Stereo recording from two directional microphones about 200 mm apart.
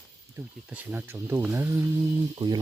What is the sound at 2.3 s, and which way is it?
Speech, 20° right (ahead or behind).